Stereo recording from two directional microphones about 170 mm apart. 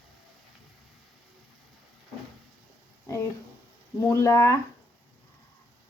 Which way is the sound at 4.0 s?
15° left (ahead or behind).